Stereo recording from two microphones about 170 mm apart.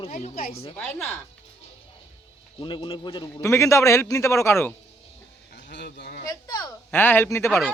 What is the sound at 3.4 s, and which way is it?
A man's voice, 15° left (ahead or behind).